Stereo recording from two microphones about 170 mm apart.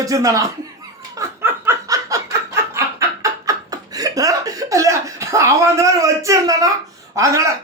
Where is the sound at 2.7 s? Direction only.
20° right (ahead or behind).